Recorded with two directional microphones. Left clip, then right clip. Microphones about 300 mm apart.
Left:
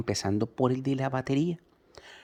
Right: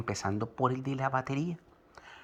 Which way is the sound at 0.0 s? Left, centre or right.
Left.